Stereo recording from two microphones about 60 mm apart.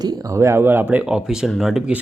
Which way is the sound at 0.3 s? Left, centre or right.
Right.